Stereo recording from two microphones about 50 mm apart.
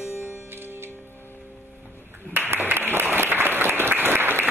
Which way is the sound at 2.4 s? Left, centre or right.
Right.